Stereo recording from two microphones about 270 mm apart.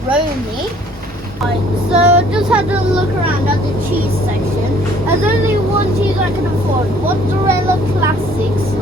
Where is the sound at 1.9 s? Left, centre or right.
Centre.